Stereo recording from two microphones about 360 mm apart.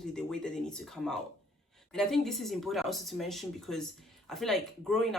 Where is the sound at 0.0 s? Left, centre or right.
Centre.